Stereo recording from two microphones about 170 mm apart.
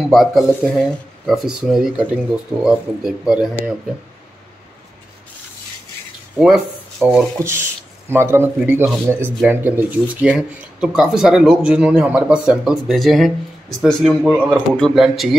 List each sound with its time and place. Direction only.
0.1 s speech: centre (ahead or behind)
6.4 s a man's voice: 5° right (ahead or behind)